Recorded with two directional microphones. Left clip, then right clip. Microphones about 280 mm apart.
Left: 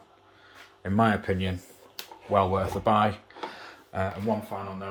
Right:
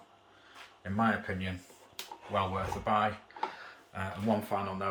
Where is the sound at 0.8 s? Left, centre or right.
Left.